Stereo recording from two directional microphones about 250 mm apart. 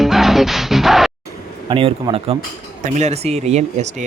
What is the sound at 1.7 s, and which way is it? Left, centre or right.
Speech, right.